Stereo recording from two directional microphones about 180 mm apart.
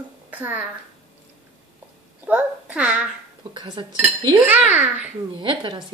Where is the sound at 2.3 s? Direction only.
5° right (ahead or behind).